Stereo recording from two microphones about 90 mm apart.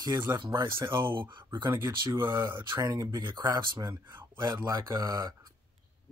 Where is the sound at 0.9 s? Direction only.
65° right (ahead or behind).